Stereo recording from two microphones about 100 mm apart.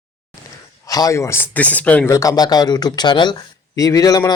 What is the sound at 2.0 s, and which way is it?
Speech, 35° left (ahead or behind).